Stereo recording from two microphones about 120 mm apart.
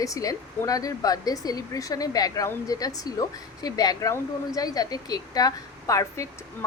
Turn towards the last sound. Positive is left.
turn(degrees=25)  # may be behind; listen again after turning